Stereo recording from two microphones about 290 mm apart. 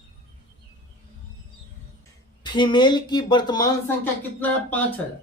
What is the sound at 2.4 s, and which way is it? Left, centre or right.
Speech, centre.